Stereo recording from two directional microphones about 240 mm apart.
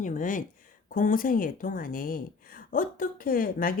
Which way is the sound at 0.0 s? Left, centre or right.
Left.